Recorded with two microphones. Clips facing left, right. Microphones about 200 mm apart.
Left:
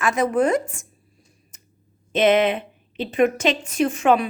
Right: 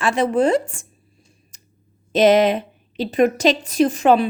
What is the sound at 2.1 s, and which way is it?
A woman's voice, 40° right (ahead or behind).